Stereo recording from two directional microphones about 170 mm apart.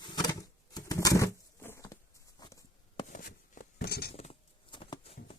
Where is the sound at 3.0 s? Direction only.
50° left (ahead or behind).